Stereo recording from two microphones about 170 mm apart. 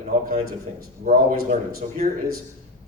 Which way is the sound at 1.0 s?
55° right (ahead or behind).